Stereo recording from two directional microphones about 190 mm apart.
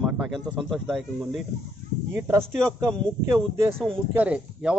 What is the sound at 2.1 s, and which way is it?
Speech, 10° right (ahead or behind).